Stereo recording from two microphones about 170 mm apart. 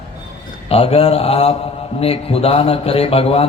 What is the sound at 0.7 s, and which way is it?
A man's voice, 35° left (ahead or behind).